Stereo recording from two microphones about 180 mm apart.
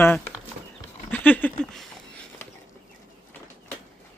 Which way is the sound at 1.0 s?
10° left (ahead or behind).